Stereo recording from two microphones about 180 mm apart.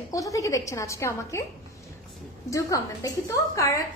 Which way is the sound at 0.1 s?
20° left (ahead or behind).